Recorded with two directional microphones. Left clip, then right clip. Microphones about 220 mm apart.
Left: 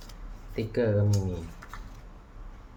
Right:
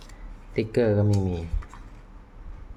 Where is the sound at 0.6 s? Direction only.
35° right (ahead or behind).